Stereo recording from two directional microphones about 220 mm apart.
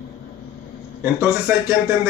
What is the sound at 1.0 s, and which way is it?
Speech, 10° right (ahead or behind).